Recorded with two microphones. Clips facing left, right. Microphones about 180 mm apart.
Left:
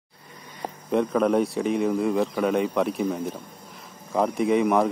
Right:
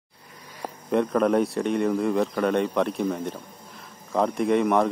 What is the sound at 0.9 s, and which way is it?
Speech, centre (ahead or behind).